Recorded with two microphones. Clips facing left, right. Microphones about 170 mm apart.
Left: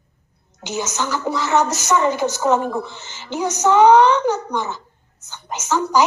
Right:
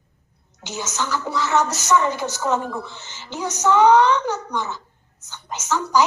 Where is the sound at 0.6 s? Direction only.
15° left (ahead or behind).